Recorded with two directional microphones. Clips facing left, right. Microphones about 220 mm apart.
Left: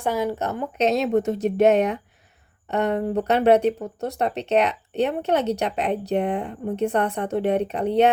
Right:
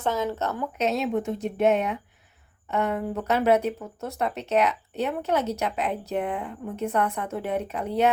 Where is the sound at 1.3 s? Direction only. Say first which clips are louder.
Left 4 dB; 80° left.